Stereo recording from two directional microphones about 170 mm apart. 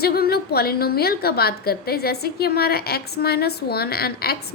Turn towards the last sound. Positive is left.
turn(degrees=65)  # may be behind; listen again after turning